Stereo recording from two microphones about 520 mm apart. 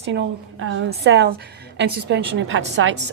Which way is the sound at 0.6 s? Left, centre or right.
Right.